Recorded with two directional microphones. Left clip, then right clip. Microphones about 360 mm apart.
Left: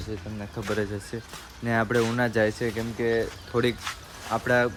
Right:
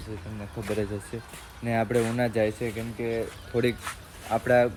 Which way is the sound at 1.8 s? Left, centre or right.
Centre.